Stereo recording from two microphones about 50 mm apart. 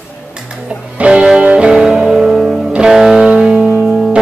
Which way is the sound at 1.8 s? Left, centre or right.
Centre.